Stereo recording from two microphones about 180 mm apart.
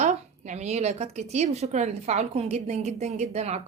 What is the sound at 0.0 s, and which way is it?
A woman's voice, 40° right (ahead or behind).